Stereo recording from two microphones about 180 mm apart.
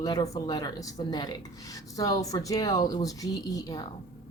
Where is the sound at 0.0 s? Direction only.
20° left (ahead or behind).